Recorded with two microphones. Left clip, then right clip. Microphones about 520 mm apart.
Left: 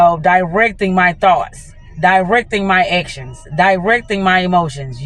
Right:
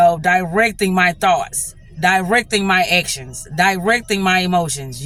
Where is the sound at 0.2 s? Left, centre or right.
Right.